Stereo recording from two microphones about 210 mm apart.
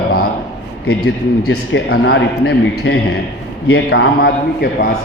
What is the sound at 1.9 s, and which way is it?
A man's voice, 60° left (ahead or behind).